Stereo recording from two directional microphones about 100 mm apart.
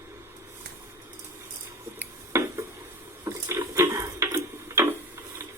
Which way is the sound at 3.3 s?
25° right (ahead or behind).